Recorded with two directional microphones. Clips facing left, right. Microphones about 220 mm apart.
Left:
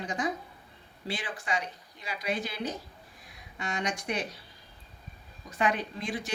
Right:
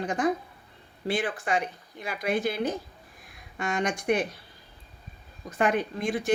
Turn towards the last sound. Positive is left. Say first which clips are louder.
# right 6 dB
turn(degrees=-50)  # may be behind; listen again after turning